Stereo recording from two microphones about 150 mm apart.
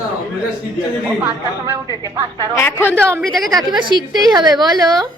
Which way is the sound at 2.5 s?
15° left (ahead or behind).